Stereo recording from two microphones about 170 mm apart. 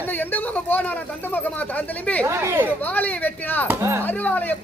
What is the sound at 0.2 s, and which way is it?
Speech, 10° left (ahead or behind).